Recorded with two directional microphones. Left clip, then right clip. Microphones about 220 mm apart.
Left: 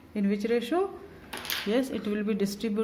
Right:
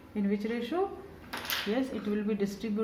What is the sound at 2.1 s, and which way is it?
Speech, 50° left (ahead or behind).